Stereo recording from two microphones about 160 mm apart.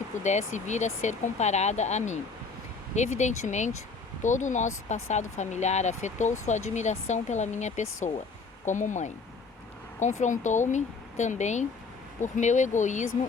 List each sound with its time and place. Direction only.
0.2 s speech: 45° left (ahead or behind)